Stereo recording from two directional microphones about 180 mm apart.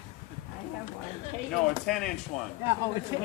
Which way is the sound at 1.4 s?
Centre (ahead or behind).